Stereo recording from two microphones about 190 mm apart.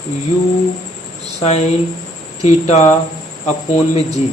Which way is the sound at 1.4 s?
35° left (ahead or behind).